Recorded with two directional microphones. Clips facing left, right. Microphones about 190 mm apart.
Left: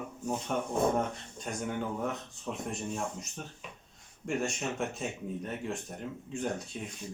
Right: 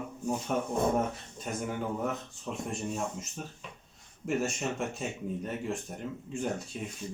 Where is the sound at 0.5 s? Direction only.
5° right (ahead or behind).